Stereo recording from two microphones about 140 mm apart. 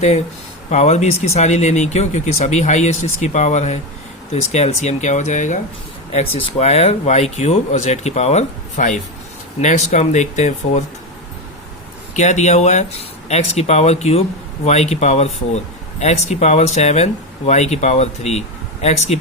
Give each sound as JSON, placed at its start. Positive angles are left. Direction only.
{"t": 0.7, "sound": "speech", "side_deg": 55}
{"t": 6.1, "sound": "speech", "side_deg": 50}
{"t": 12.1, "sound": "speech", "side_deg": 60}